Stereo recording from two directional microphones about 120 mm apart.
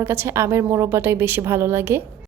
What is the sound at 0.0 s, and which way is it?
A woman's voice, 20° right (ahead or behind).